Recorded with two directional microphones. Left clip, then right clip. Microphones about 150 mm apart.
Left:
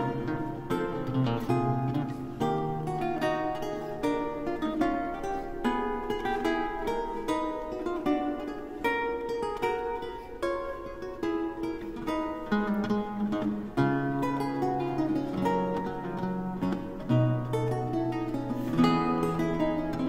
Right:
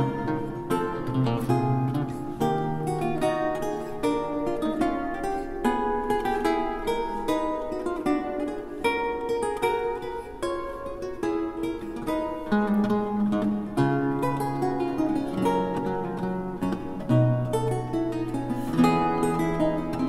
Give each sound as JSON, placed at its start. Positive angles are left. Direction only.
{"t": 0.3, "sound": "music", "side_deg": 15}
{"t": 8.8, "sound": "music", "side_deg": 15}
{"t": 11.2, "sound": "music", "side_deg": 15}
{"t": 18.8, "sound": "music", "side_deg": 10}